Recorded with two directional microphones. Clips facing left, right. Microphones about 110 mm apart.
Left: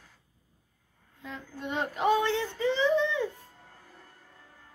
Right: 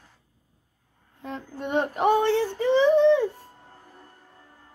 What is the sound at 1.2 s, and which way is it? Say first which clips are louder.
Child singing: right 6 dB; 55° right (ahead or behind).